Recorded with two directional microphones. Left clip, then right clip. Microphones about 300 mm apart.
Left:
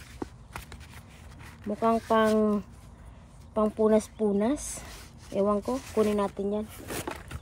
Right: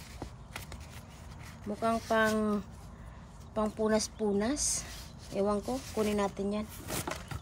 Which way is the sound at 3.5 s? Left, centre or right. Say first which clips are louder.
Left 6 dB; centre.